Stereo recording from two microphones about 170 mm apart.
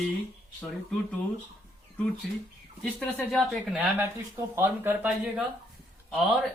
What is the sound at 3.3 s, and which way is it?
Speech, centre (ahead or behind).